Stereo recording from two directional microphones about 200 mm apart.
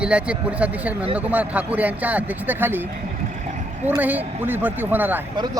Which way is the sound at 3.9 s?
10° right (ahead or behind).